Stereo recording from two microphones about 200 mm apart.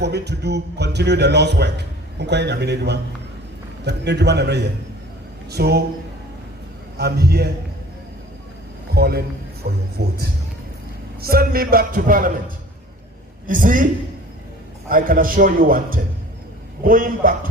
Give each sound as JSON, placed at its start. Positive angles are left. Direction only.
{"t": 0.0, "sound": "a man's voice", "side_deg": -55}
{"t": 7.0, "sound": "speech", "side_deg": -50}
{"t": 9.0, "sound": "speech", "side_deg": -50}
{"t": 11.2, "sound": "speech", "side_deg": -50}
{"t": 13.5, "sound": "speech", "side_deg": -40}
{"t": 14.8, "sound": "speech", "side_deg": -45}